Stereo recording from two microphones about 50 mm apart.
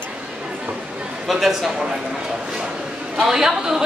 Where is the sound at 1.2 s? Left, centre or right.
Centre.